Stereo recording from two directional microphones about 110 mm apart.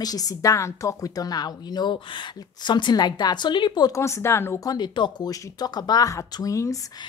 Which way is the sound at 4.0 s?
25° left (ahead or behind).